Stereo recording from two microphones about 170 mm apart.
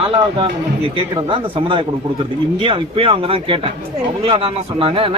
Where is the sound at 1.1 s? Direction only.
30° right (ahead or behind).